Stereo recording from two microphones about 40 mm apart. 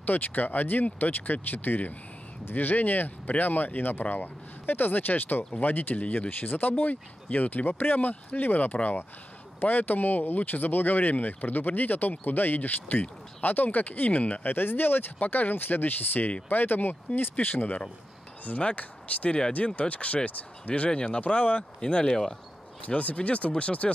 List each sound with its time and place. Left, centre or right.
0.0 s speech: left
14.4 s speech: left
18.4 s speech: left
20.9 s speech: left
21.7 s speech: left
22.8 s speech: left